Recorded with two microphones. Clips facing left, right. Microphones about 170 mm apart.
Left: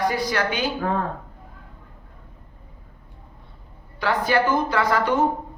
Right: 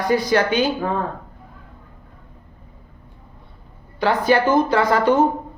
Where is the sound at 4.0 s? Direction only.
25° right (ahead or behind).